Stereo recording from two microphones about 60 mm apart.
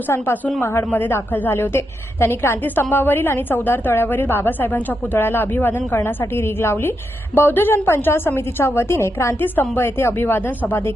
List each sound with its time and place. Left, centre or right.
0.1 s a woman's voice: left
0.9 s a woman's voice: left